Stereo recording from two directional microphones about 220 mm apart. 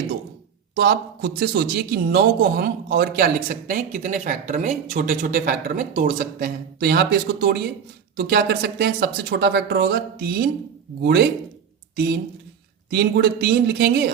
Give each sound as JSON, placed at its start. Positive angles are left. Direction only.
{"t": 0.8, "sound": "speech", "side_deg": -45}